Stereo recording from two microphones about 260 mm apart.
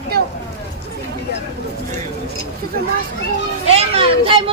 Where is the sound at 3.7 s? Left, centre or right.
Right.